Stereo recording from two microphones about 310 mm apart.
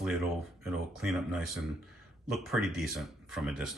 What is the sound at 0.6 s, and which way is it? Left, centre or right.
Speech, centre.